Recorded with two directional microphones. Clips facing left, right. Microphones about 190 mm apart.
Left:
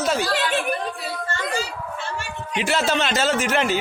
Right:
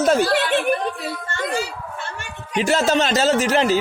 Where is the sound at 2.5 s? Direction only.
40° right (ahead or behind).